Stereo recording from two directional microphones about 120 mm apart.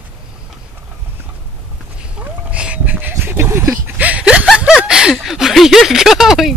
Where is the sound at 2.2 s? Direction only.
10° right (ahead or behind).